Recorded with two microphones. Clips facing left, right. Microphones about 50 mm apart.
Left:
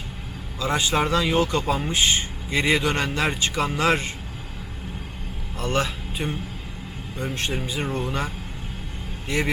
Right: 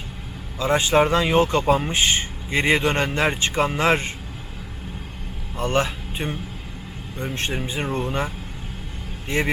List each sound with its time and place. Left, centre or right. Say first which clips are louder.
0.6 s speech: right 5 dB; right
5.5 s speech: right 3 dB; right
7.7 s speech: right 2 dB; right